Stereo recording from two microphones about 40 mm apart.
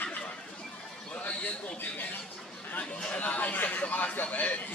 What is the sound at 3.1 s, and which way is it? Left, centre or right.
A man's voice, left.